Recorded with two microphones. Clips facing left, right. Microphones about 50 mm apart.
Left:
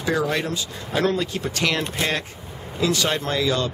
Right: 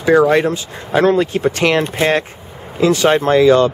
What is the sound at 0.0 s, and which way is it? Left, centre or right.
Speech, right.